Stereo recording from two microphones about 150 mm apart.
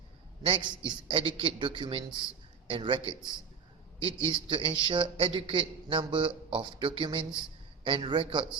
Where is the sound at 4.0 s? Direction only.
35° right (ahead or behind).